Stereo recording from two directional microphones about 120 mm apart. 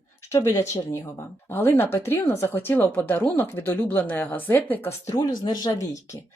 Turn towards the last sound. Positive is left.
turn(degrees=30)  # may be behind; listen again after turning